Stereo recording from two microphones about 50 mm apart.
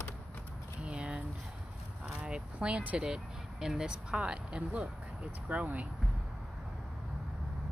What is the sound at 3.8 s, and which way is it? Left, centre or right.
Speech, right.